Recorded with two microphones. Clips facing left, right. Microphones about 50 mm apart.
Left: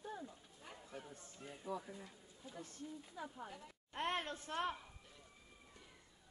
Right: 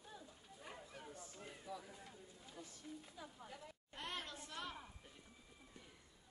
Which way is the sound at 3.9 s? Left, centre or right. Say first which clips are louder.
Left 8 dB; left.